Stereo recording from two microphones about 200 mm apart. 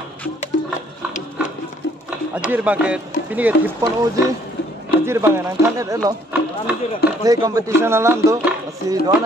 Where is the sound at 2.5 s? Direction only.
10° right (ahead or behind).